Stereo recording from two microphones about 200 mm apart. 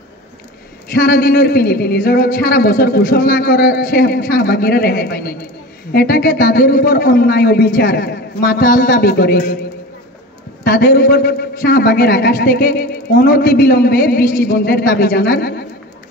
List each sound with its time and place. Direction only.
0.9 s a man's voice: 45° left (ahead or behind)
10.6 s a man's voice: 50° left (ahead or behind)